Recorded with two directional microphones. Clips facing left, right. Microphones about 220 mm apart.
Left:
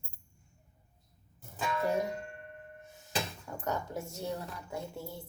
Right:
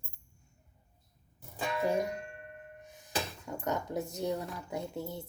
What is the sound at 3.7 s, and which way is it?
A woman's voice, 20° right (ahead or behind).